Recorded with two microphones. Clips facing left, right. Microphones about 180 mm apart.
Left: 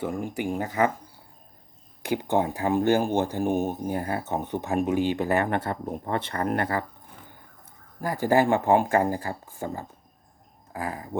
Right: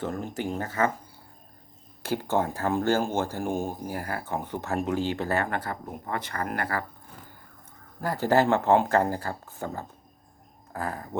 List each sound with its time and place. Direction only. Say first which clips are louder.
0.0 s speech: left 2 dB; 10° left (ahead or behind)
2.0 s speech: left 2 dB; 15° left (ahead or behind)
8.0 s speech: left 1 dB; 10° left (ahead or behind)